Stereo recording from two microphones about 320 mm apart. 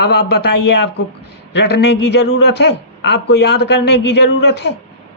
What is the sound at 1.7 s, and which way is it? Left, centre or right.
Speech, left.